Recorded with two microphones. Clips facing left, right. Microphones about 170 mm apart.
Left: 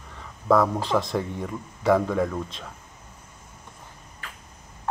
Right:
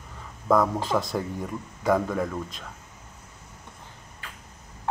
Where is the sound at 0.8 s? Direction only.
Centre (ahead or behind).